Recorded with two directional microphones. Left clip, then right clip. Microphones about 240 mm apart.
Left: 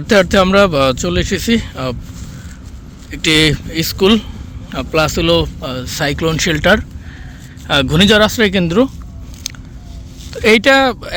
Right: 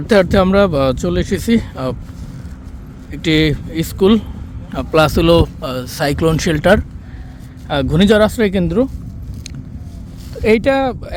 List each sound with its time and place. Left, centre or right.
0.1 s speech: centre
3.1 s a man's voice: centre
10.3 s a man's voice: centre